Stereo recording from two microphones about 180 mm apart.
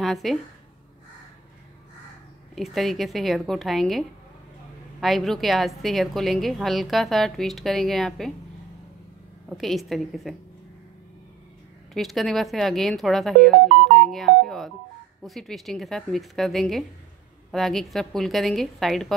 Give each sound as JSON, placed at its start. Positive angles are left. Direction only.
{"t": 0.0, "sound": "a woman's voice", "side_deg": 0}
{"t": 2.5, "sound": "a woman's voice", "side_deg": 0}
{"t": 5.0, "sound": "a woman's voice", "side_deg": 0}
{"t": 9.5, "sound": "a woman's voice", "side_deg": 0}
{"t": 11.9, "sound": "a woman's voice", "side_deg": 0}